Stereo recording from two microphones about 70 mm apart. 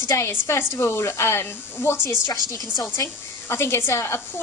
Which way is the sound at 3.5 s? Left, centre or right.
Left.